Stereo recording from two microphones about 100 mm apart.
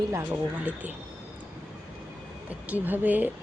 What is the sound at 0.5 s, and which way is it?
Speech, 15° right (ahead or behind).